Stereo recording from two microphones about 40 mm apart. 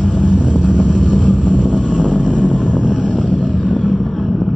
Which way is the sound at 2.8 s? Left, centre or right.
Centre.